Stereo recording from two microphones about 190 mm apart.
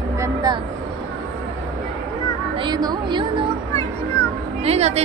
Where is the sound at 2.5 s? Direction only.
25° right (ahead or behind).